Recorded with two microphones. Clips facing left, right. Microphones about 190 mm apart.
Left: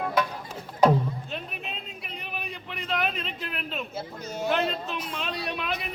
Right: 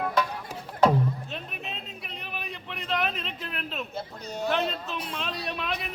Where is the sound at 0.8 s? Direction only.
Centre (ahead or behind).